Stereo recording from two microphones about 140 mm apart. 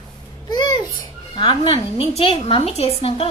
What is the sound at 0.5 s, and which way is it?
Babbling, 30° left (ahead or behind).